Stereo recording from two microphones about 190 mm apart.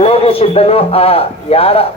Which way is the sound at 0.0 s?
30° left (ahead or behind).